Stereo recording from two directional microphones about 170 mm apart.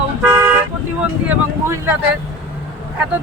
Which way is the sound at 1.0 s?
10° right (ahead or behind).